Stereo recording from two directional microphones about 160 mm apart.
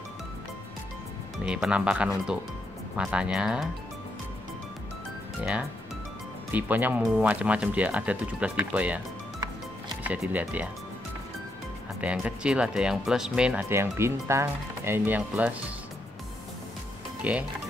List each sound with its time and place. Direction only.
1.4 s speech: 5° right (ahead or behind)
6.5 s speech: 10° right (ahead or behind)
10.0 s speech: 10° right (ahead or behind)
12.0 s speech: 10° right (ahead or behind)
17.2 s speech: 10° right (ahead or behind)